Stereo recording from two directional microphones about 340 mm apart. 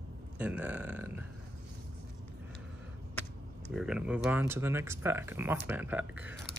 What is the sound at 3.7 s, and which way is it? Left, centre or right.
Speech, centre.